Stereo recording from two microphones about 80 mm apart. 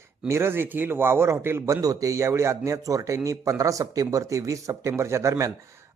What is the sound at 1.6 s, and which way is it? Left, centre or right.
A man's voice, right.